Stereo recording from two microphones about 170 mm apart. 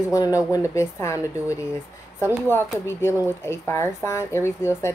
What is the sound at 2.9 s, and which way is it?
Speech, 15° left (ahead or behind).